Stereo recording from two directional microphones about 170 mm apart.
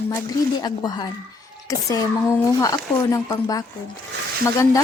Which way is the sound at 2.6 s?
20° left (ahead or behind).